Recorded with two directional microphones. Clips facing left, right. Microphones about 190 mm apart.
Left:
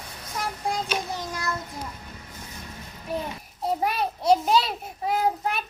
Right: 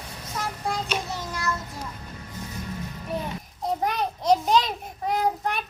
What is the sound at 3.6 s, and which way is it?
Child singing, 10° left (ahead or behind).